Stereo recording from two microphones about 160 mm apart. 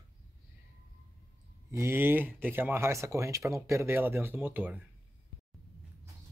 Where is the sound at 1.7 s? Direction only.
15° right (ahead or behind).